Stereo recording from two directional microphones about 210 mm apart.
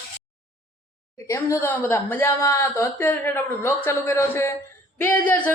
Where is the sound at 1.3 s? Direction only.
15° left (ahead or behind).